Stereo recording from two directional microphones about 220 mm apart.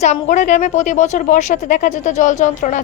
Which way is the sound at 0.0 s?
35° left (ahead or behind).